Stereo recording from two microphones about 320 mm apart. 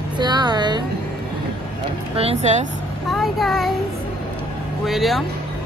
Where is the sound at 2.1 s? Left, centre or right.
Centre.